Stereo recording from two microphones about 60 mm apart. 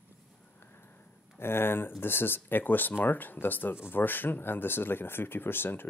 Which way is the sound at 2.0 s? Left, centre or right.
Left.